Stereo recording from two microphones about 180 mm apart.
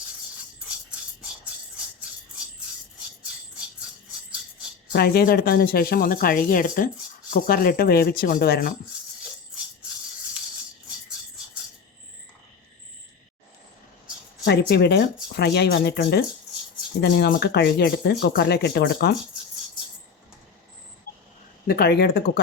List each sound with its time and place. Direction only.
4.9 s speech: 60° left (ahead or behind)
14.4 s speech: 65° left (ahead or behind)
21.7 s speech: 60° left (ahead or behind)